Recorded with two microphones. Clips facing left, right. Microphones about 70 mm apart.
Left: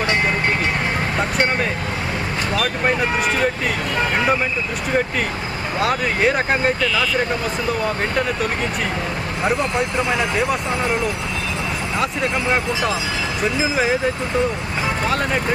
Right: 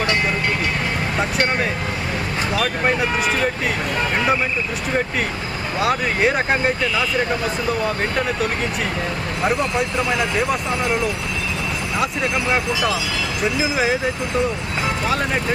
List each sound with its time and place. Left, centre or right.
2.6 s speech: centre
5.8 s speech: centre
7.9 s speech: centre
10.2 s speech: centre